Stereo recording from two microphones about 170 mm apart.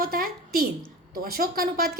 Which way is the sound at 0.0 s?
60° right (ahead or behind).